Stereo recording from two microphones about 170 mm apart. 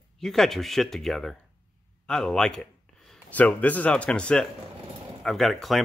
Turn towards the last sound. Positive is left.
turn(degrees=0)  # may be behind; listen again after turning